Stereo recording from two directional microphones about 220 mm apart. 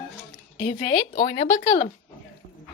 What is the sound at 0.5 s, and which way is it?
A woman's voice, 25° left (ahead or behind).